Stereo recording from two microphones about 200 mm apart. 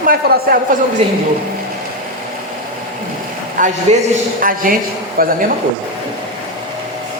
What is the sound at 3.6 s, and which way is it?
A woman's voice, 40° right (ahead or behind).